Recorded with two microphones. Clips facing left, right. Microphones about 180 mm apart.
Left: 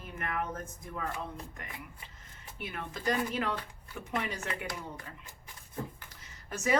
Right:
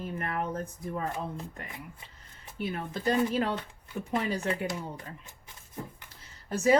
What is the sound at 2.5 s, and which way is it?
Speech, 30° right (ahead or behind).